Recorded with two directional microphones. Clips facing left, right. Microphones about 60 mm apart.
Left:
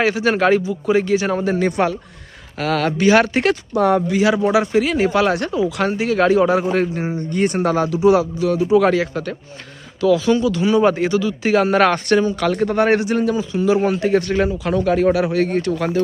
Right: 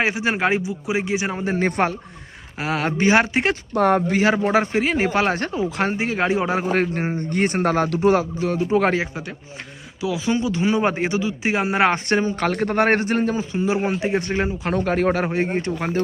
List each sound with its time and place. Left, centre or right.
0.0 s speech: right
1.5 s a man's voice: right
2.6 s speech: centre
3.5 s a man's voice: right
6.7 s a man's voice: right
10.0 s speech: centre
12.5 s a man's voice: right
14.7 s a man's voice: right
15.4 s speech: right